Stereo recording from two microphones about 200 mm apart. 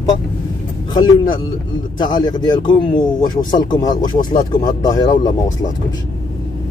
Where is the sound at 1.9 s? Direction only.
20° left (ahead or behind).